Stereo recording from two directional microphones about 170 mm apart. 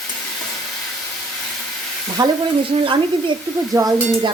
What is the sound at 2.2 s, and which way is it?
Speech, 25° right (ahead or behind).